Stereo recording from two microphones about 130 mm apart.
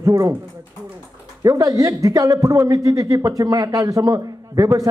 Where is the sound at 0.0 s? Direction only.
25° right (ahead or behind).